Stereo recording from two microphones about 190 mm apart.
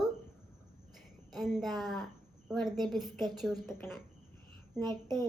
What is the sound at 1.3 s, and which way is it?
A woman's voice, centre (ahead or behind).